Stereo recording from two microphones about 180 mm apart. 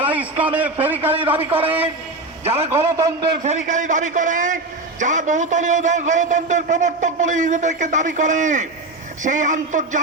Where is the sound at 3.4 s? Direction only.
45° right (ahead or behind).